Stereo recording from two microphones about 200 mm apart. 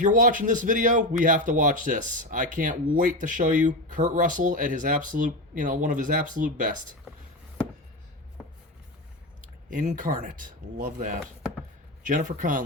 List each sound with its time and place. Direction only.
0.0 s speech: 40° right (ahead or behind)
9.6 s speech: 40° right (ahead or behind)